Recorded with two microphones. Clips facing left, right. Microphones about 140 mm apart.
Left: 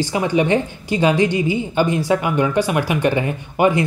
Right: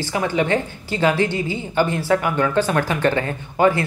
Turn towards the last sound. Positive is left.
turn(degrees=15)  # may be behind; listen again after turning